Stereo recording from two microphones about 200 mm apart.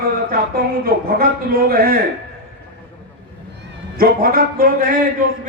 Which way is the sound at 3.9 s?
50° right (ahead or behind).